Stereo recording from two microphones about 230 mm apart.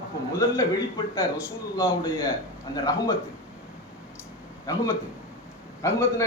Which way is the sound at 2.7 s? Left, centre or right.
Centre.